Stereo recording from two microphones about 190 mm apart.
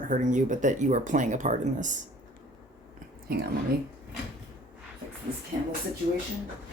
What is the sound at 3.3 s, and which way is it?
Speech, 50° right (ahead or behind).